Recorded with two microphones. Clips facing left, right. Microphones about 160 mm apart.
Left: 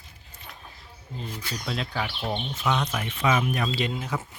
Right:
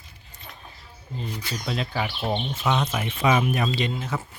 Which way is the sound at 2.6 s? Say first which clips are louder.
Even; 20° right (ahead or behind).